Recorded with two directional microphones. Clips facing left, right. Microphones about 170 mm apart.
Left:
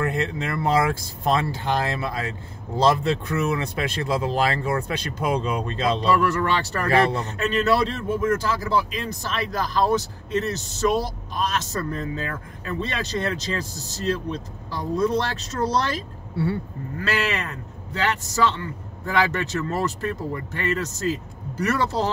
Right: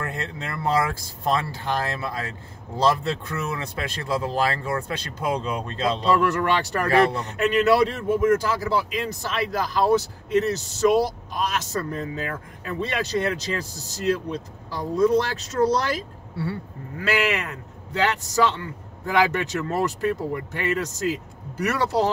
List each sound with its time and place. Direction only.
0.1 s speech: 20° left (ahead or behind)
6.0 s speech: 20° right (ahead or behind)